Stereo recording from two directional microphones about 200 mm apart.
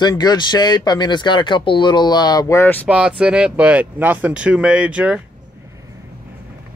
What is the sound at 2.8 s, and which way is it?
Speech, 5° right (ahead or behind).